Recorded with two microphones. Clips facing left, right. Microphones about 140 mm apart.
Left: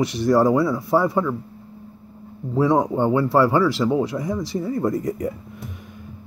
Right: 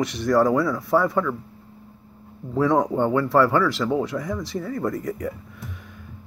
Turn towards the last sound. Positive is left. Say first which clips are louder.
# left 4 dB
turn(degrees=15)  # may be behind; listen again after turning